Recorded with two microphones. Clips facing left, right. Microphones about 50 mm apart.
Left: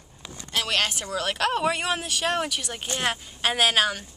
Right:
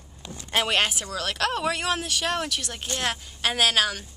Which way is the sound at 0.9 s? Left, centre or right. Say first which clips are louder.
Left 2 dB; centre.